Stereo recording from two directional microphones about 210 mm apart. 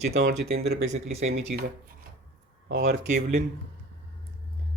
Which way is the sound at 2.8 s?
35° right (ahead or behind).